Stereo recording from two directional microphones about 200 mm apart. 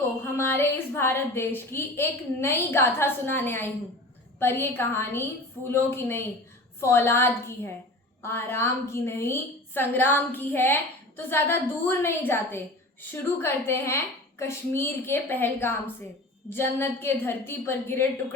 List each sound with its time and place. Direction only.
0.3 s a woman's voice: 10° left (ahead or behind)